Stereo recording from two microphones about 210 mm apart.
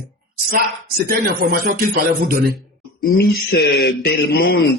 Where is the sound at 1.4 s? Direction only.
50° right (ahead or behind).